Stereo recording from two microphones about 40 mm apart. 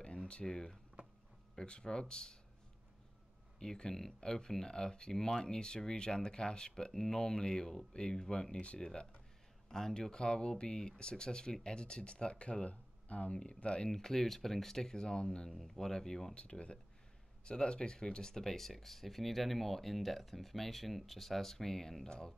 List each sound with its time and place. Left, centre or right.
0.0 s a sound: left
0.5 s speech: centre
3.5 s speech: centre
13.8 s speech: centre
15.5 s speech: centre
16.3 s speech: left